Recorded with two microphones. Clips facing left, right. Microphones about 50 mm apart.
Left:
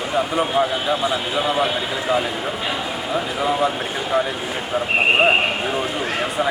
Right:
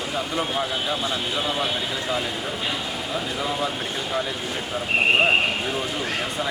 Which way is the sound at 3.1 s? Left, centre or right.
Centre.